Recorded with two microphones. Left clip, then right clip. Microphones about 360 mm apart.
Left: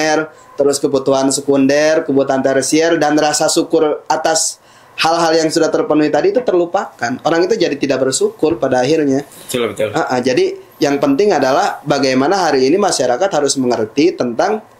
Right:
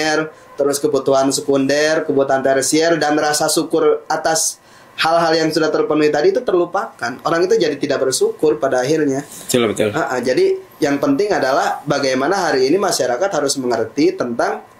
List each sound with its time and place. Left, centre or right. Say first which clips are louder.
0.0 s speech: left 3 dB; left
9.5 s speech: right 1 dB; right
9.9 s speech: left 2 dB; left